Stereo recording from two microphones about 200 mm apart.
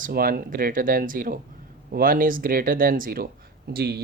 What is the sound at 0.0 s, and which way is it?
Speech, 45° right (ahead or behind).